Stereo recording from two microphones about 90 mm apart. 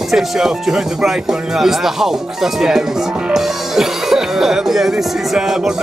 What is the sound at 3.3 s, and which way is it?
Speech, 5° right (ahead or behind).